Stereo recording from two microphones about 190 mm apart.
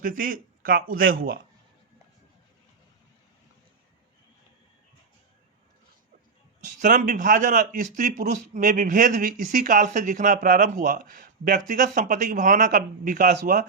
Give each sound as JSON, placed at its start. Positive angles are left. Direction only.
{"t": 0.0, "sound": "a man's voice", "side_deg": -45}
{"t": 6.7, "sound": "a man's voice", "side_deg": -45}